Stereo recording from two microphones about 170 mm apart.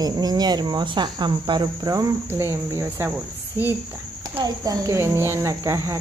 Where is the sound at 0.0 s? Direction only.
25° right (ahead or behind).